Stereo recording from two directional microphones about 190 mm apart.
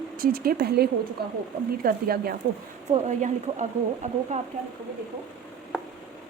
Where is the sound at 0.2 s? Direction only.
50° right (ahead or behind).